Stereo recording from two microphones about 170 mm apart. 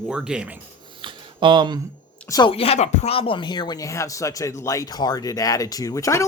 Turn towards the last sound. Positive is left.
turn(degrees=20)  # may be behind; listen again after turning